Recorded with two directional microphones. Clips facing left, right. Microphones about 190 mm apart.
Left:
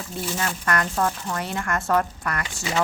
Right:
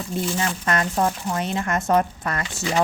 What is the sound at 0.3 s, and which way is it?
Speech, 20° right (ahead or behind).